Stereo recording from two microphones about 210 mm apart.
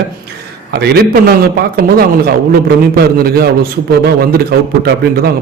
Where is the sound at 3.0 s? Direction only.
45° right (ahead or behind).